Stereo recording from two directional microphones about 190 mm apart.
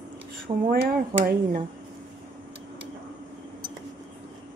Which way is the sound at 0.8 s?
50° right (ahead or behind).